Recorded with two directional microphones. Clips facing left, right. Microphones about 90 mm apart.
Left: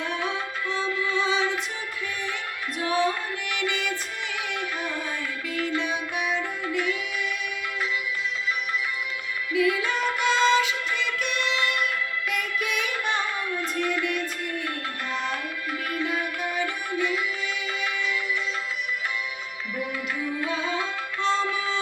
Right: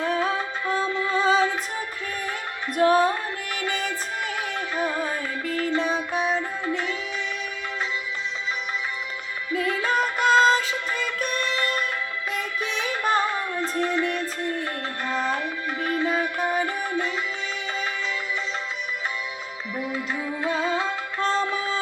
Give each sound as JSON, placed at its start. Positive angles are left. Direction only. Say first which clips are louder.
{"t": 0.0, "sound": "music", "louder": "right 5 dB", "side_deg": -35}
{"t": 2.7, "sound": "music", "louder": "right 6 dB", "side_deg": -45}
{"t": 9.5, "sound": "music", "louder": "even", "side_deg": -40}
{"t": 15.1, "sound": "tabla", "louder": "right 5 dB", "side_deg": -35}
{"t": 15.8, "sound": "music", "louder": "right 5 dB", "side_deg": -35}
{"t": 20.4, "sound": "music", "louder": "right 6 dB", "side_deg": -35}